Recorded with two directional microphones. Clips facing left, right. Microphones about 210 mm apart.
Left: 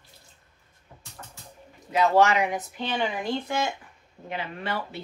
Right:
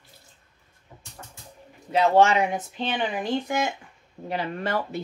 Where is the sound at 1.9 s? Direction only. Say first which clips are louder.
Right 2 dB; 30° right (ahead or behind).